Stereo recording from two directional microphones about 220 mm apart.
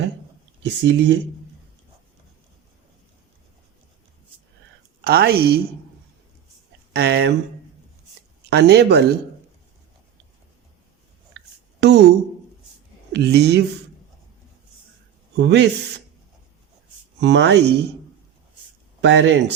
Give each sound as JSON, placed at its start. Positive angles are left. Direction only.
{"t": 0.6, "sound": "speech", "side_deg": -55}
{"t": 5.0, "sound": "speech", "side_deg": -45}
{"t": 6.9, "sound": "speech", "side_deg": -45}
{"t": 8.4, "sound": "speech", "side_deg": -50}
{"t": 11.3, "sound": "a sound", "side_deg": -50}
{"t": 13.1, "sound": "speech", "side_deg": -50}
{"t": 15.4, "sound": "speech", "side_deg": -50}
{"t": 17.2, "sound": "speech", "side_deg": -55}
{"t": 19.0, "sound": "speech", "side_deg": -55}